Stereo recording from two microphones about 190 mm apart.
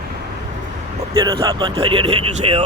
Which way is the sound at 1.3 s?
30° right (ahead or behind).